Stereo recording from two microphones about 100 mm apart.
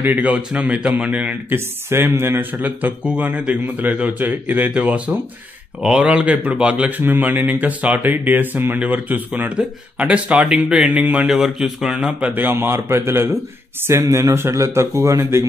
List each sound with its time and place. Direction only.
0.0 s a man's voice: 15° right (ahead or behind)
1.9 s a man's voice: 25° right (ahead or behind)